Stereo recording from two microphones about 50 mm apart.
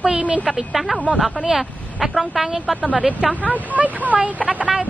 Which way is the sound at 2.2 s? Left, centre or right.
Centre.